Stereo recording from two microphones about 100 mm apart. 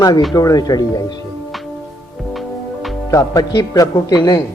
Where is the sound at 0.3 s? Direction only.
40° left (ahead or behind).